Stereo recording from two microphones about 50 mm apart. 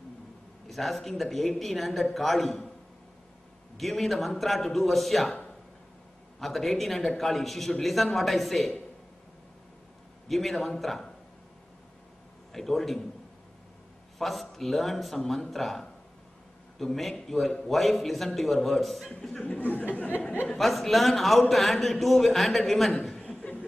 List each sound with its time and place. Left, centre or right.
0.7 s a man's voice: centre
3.7 s a man's voice: centre
6.4 s a man's voice: centre
10.2 s a man's voice: centre
12.5 s a man's voice: centre
14.1 s a man's voice: centre
19.4 s speech: left
20.5 s a man's voice: centre